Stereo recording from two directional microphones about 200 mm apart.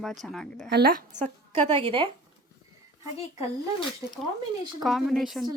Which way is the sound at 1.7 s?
25° right (ahead or behind).